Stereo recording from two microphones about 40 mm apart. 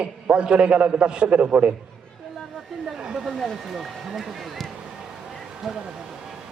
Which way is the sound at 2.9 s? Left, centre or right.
Centre.